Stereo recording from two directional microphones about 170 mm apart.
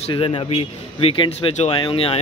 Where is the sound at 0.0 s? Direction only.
35° left (ahead or behind).